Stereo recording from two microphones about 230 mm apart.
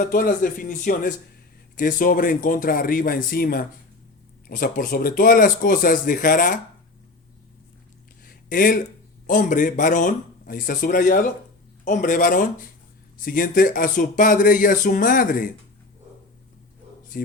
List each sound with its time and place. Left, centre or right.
0.0 s speech: left
8.2 s a sound: left
9.2 s speech: left
17.1 s speech: left